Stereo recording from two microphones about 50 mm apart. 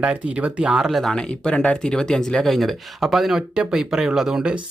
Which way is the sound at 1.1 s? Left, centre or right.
Centre.